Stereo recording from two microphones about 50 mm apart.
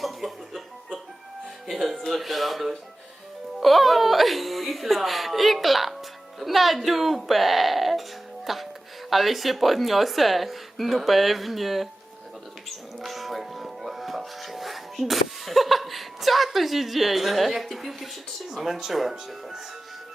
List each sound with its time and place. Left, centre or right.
0.0 s music: centre
1.6 s speech: centre
13.0 s music: centre
18.5 s speech: centre